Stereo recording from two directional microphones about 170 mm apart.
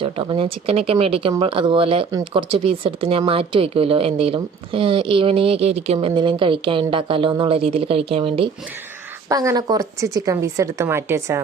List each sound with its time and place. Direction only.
0.0 s speech: 30° right (ahead or behind)
9.3 s a woman's voice: 20° right (ahead or behind)